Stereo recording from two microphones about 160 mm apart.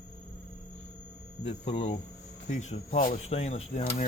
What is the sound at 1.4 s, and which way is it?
Speech, 35° left (ahead or behind).